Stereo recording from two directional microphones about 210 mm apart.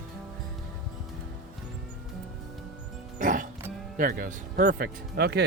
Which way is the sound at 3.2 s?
40° right (ahead or behind).